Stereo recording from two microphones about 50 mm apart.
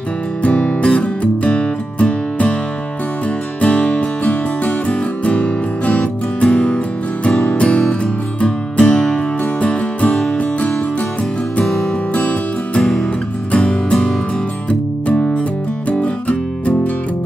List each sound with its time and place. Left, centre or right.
0.4 s music: left
3.6 s music: centre
12.1 s music: left